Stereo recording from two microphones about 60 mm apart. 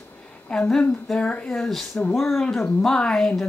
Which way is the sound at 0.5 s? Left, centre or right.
Centre.